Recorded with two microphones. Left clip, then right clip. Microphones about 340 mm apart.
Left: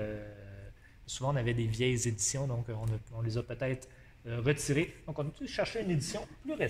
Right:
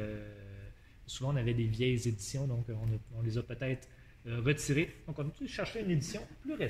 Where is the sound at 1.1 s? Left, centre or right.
Centre.